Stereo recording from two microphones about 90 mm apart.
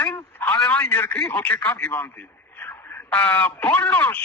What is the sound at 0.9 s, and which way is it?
Speech, 25° left (ahead or behind).